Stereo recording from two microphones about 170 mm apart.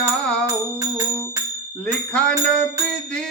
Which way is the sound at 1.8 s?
5° left (ahead or behind).